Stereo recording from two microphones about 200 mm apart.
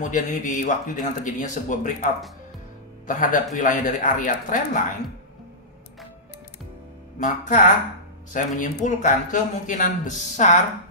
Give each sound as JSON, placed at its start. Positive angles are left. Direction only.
{"t": 0.0, "sound": "speech", "side_deg": 40}
{"t": 3.1, "sound": "speech", "side_deg": 40}
{"t": 7.2, "sound": "speech", "side_deg": 40}